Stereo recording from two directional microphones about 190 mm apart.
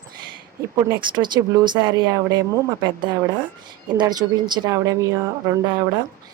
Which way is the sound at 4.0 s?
20° right (ahead or behind).